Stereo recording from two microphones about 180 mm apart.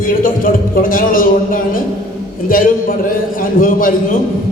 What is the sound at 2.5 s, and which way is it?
A man's voice, 50° left (ahead or behind).